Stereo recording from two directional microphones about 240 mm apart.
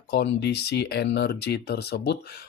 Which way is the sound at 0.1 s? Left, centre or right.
Left.